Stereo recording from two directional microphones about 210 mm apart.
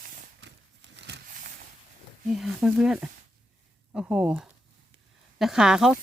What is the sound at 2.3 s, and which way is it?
Speech, centre (ahead or behind).